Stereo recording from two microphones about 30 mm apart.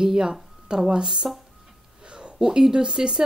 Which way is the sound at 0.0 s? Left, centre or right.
Right.